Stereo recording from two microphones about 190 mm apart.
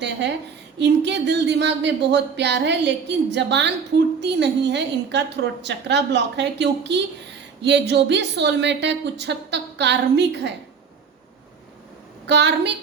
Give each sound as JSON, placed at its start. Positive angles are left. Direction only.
{"t": 0.0, "sound": "a woman's voice", "side_deg": -65}
{"t": 12.2, "sound": "a woman's voice", "side_deg": -65}